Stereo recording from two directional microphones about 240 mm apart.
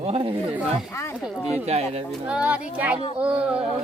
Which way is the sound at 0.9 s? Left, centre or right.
Centre.